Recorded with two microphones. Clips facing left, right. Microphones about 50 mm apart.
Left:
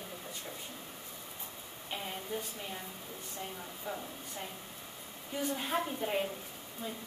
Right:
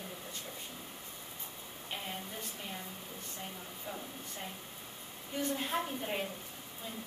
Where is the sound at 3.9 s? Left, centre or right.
Centre.